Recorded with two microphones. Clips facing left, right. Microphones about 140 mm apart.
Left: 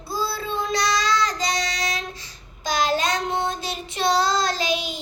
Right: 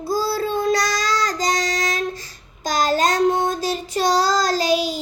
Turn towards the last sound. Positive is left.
turn(degrees=-40)  # may be behind; listen again after turning